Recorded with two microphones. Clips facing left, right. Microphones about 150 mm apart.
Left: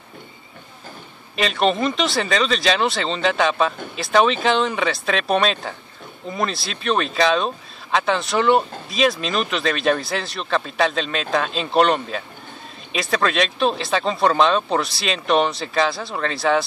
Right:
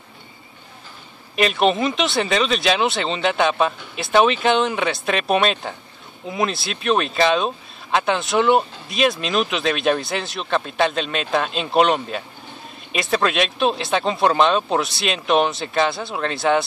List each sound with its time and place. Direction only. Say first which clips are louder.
1.3 s speech: right 2 dB; 5° right (ahead or behind)